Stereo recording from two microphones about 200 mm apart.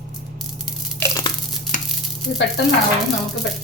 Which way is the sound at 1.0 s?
20° left (ahead or behind).